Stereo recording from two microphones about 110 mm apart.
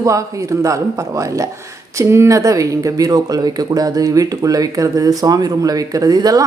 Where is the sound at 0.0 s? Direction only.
30° right (ahead or behind).